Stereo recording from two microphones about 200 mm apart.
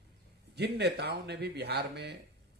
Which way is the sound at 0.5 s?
55° right (ahead or behind).